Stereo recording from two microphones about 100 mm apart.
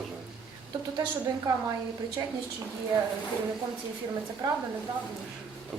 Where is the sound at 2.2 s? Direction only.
45° right (ahead or behind).